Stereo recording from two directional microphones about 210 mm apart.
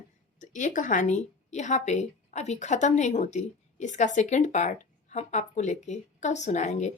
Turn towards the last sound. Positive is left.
turn(degrees=35)  # may be behind; listen again after turning